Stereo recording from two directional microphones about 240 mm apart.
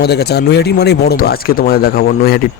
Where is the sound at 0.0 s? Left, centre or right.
Left.